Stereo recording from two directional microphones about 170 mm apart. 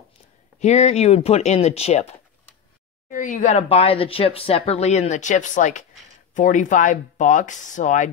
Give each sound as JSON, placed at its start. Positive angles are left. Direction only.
{"t": 0.6, "sound": "speech", "side_deg": 40}
{"t": 3.1, "sound": "speech", "side_deg": 50}